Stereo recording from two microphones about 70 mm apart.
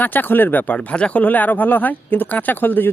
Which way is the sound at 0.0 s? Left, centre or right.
Left.